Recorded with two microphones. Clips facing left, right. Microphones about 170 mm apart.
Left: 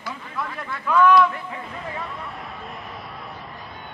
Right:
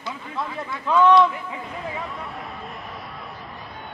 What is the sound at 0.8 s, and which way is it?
Speech, 25° right (ahead or behind).